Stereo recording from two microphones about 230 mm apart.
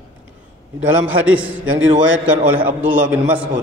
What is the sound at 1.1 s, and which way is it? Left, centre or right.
A man's voice, right.